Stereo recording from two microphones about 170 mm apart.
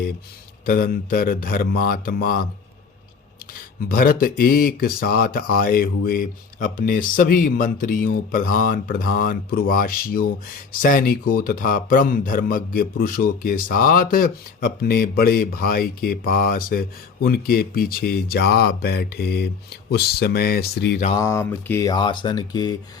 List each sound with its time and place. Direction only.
0.6 s speech: 60° left (ahead or behind)
3.8 s speech: 55° left (ahead or behind)
21.2 s speech: 15° left (ahead or behind)